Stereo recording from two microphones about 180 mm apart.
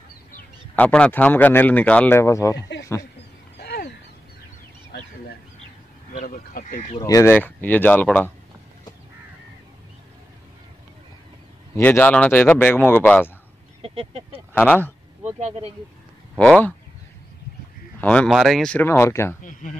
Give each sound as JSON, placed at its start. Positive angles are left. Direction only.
{"t": 0.7, "sound": "speech", "side_deg": 5}
{"t": 3.5, "sound": "a sound", "side_deg": 70}
{"t": 6.1, "sound": "speech", "side_deg": 50}
{"t": 7.0, "sound": "speech", "side_deg": 20}
{"t": 11.7, "sound": "speech", "side_deg": 10}
{"t": 13.8, "sound": "speech", "side_deg": -30}
{"t": 14.5, "sound": "speech", "side_deg": 10}
{"t": 16.3, "sound": "speech", "side_deg": 5}
{"t": 18.0, "sound": "speech", "side_deg": 5}
{"t": 19.4, "sound": "speech", "side_deg": 45}